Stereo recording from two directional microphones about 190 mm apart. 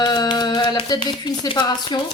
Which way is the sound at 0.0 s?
20° left (ahead or behind).